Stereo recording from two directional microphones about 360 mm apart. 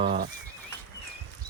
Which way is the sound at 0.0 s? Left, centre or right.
Centre.